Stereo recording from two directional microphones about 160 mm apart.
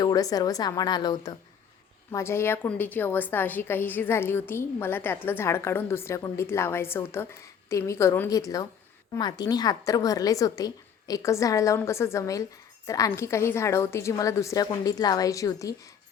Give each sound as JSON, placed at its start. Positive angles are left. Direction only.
{"t": 0.0, "sound": "a woman's voice", "side_deg": 25}
{"t": 2.1, "sound": "a woman's voice", "side_deg": 15}